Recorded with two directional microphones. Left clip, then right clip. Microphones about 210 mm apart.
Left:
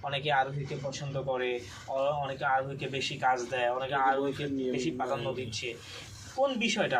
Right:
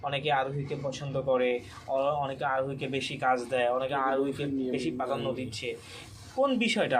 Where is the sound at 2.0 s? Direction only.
40° right (ahead or behind).